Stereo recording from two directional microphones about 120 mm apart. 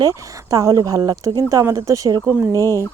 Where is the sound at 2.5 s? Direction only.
25° left (ahead or behind).